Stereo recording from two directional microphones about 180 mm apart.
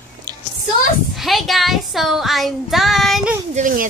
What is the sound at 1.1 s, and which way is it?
Child singing, centre (ahead or behind).